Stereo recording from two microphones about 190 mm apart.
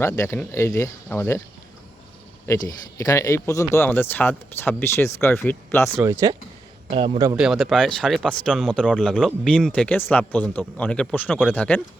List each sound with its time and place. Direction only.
0.0 s speech: 15° left (ahead or behind)
2.5 s speech: 20° left (ahead or behind)
6.0 s speech: 15° right (ahead or behind)
6.9 s a man's voice: 25° right (ahead or behind)
7.3 s speech: centre (ahead or behind)